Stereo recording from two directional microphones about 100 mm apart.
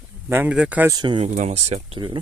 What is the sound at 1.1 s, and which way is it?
Speech, 90° right.